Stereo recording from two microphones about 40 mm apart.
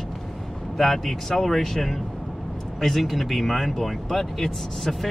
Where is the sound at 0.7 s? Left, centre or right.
Centre.